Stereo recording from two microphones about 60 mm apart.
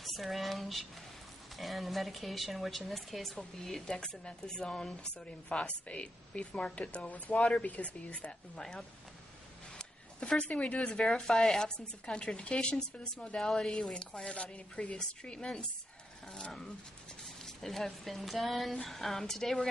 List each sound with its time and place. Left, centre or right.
0.0 s a woman's voice: centre
9.8 s a sound: centre
10.5 s a woman's voice: left; by 19.7 s centre